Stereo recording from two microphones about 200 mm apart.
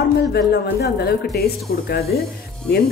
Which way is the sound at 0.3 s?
55° left (ahead or behind).